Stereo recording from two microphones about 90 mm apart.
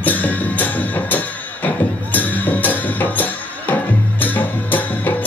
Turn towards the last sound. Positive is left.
turn(degrees=20)  # may be behind; listen again after turning